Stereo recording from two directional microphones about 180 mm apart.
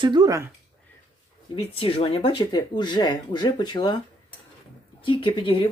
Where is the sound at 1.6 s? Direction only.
30° left (ahead or behind).